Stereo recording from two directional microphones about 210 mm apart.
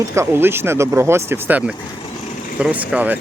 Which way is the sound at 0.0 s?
15° right (ahead or behind).